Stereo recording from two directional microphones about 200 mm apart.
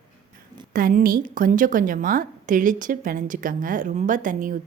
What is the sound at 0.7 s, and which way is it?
A woman's voice, 45° right (ahead or behind).